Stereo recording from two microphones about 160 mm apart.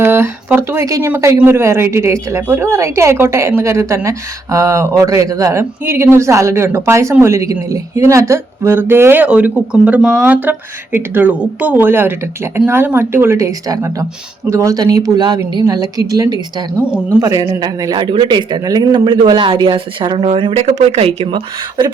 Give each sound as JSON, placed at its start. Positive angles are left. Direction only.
{"t": 0.0, "sound": "a man's voice", "side_deg": -15}